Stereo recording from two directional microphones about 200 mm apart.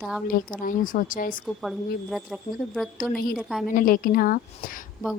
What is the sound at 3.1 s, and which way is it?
A woman's voice, 45° left (ahead or behind).